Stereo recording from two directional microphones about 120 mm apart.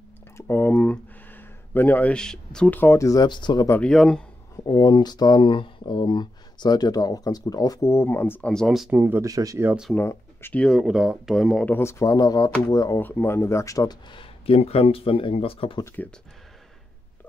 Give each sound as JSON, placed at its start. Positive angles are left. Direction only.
{"t": 0.4, "sound": "speech", "side_deg": 20}
{"t": 3.8, "sound": "speech", "side_deg": 5}
{"t": 4.6, "sound": "speech", "side_deg": 35}
{"t": 8.5, "sound": "speech", "side_deg": 0}
{"t": 8.9, "sound": "speech", "side_deg": -15}
{"t": 9.3, "sound": "speech", "side_deg": -30}
{"t": 9.9, "sound": "speech", "side_deg": 15}
{"t": 10.6, "sound": "speech", "side_deg": 0}
{"t": 11.6, "sound": "speech", "side_deg": 20}
{"t": 13.0, "sound": "speech", "side_deg": 15}
{"t": 14.1, "sound": "speech", "side_deg": 50}